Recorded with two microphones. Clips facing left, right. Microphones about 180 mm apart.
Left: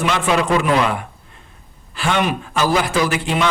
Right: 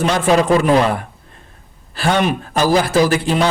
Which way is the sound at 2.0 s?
35° right (ahead or behind).